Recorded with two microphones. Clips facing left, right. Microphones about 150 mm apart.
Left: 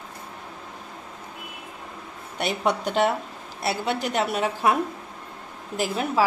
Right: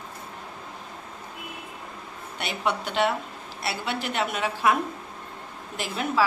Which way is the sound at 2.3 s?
45° left (ahead or behind).